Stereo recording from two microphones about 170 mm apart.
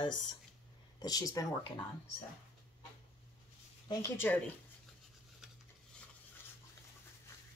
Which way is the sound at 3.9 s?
20° left (ahead or behind).